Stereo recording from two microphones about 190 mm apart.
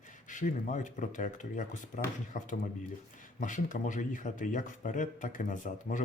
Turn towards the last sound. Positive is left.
turn(degrees=45)  # may be behind; listen again after turning